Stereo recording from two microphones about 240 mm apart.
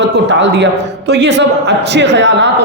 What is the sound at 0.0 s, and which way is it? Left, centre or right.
A man's voice, right.